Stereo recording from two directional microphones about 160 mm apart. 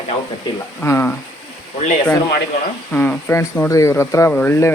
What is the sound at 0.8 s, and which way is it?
Speech, 15° left (ahead or behind).